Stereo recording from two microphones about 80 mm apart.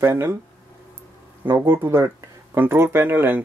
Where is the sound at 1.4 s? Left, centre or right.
Right.